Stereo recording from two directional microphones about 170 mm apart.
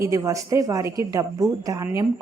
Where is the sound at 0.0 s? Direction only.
20° right (ahead or behind).